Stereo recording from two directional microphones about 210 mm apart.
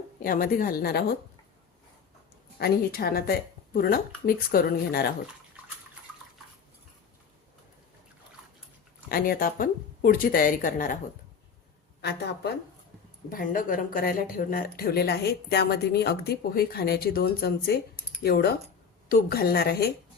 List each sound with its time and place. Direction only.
0.2 s speech: 45° left (ahead or behind)
2.6 s speech: 50° left (ahead or behind)
9.0 s speech: 45° left (ahead or behind)
12.0 s speech: 50° left (ahead or behind)
13.3 s speech: 40° left (ahead or behind)